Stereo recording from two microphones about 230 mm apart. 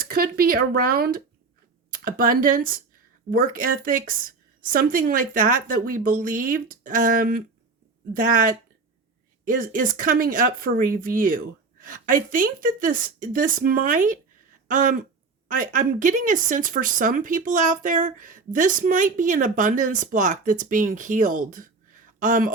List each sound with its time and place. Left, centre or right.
0.0 s speech: right